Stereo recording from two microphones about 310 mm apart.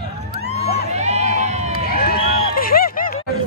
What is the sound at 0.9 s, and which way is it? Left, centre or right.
Crowd, right.